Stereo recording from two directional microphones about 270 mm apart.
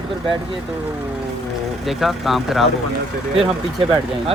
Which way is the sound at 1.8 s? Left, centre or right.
Centre.